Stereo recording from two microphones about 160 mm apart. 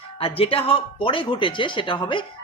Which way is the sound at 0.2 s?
35° left (ahead or behind).